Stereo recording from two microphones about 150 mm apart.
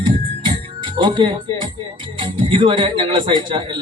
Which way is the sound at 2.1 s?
35° right (ahead or behind).